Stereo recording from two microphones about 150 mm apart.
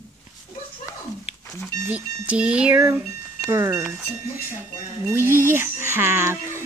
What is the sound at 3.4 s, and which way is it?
Speech, 20° right (ahead or behind).